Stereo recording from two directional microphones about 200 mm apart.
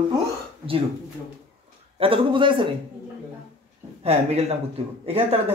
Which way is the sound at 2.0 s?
25° right (ahead or behind).